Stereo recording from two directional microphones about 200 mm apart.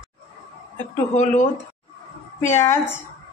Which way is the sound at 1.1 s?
40° left (ahead or behind).